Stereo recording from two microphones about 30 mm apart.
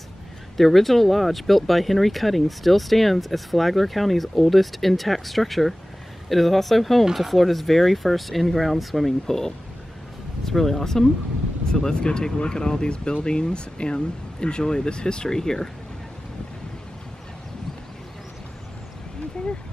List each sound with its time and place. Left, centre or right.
0.6 s speech: centre; by 15.2 s left
15.2 s speech: centre